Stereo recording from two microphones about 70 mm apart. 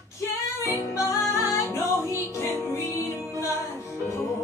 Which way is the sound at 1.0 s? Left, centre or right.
Left.